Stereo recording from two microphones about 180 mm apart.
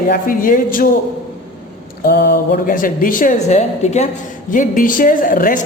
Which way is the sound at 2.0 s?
60° left (ahead or behind).